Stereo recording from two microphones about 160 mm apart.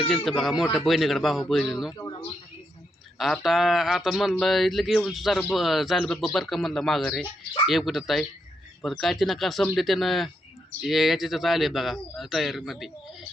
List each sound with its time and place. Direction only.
0.4 s a man's voice: 5° right (ahead or behind)
2.0 s a man's voice: 25° left (ahead or behind)
3.2 s a man's voice: centre (ahead or behind)